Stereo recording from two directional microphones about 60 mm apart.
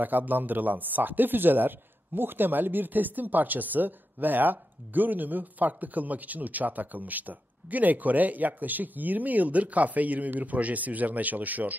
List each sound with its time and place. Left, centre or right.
0.0 s a man's voice: right